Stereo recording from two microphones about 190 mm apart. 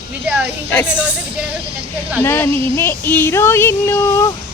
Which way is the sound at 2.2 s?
10° left (ahead or behind).